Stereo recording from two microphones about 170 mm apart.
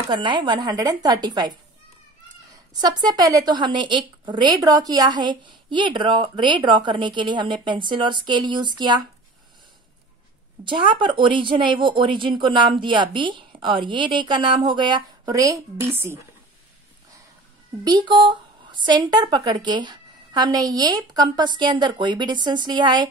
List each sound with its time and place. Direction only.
0.1 s a woman's voice: 25° right (ahead or behind)
2.7 s a woman's voice: 25° right (ahead or behind)
10.6 s a woman's voice: 30° right (ahead or behind)
17.8 s a woman's voice: 25° right (ahead or behind)